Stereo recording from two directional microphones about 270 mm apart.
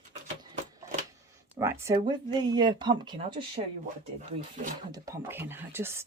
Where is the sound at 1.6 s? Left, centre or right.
Centre.